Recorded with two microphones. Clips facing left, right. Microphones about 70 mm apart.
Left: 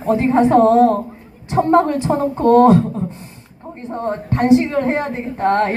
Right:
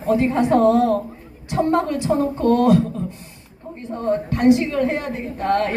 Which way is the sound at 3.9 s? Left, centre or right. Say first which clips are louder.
Even; left.